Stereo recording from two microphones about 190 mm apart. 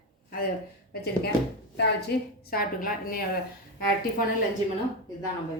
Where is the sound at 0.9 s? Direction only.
60° left (ahead or behind).